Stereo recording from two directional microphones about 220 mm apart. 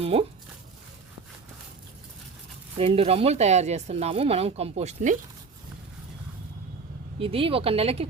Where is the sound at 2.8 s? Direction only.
25° right (ahead or behind).